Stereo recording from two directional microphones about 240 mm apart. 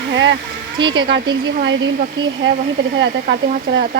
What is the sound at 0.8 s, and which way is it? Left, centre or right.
Speech, centre.